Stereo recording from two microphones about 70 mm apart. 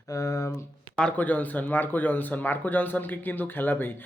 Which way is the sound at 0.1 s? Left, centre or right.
Left.